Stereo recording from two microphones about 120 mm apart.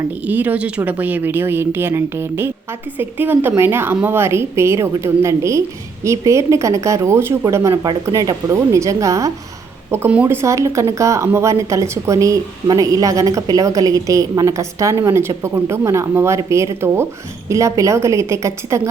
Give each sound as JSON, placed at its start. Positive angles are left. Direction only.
{"t": 0.3, "sound": "a woman's voice", "side_deg": -15}